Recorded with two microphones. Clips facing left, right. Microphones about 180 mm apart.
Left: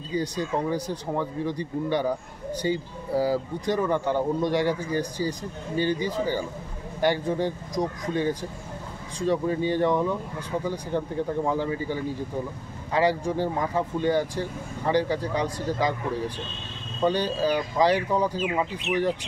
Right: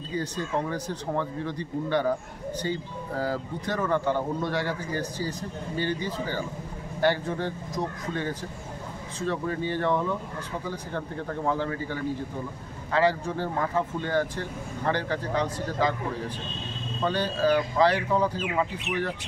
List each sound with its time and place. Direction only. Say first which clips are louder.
0.1 s speech: left 2 dB; 15° left (ahead or behind)
17.0 s speech: left 2 dB; 15° left (ahead or behind)